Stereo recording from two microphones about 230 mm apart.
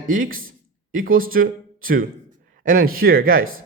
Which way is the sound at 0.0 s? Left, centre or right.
Right.